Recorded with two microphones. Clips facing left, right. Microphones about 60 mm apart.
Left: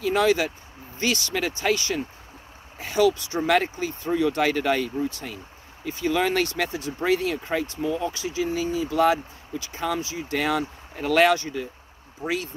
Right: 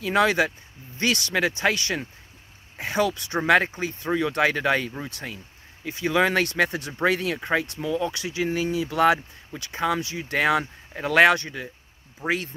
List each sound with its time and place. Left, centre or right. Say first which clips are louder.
0.0 s speech: even; right
12.2 s speech: right 2 dB; right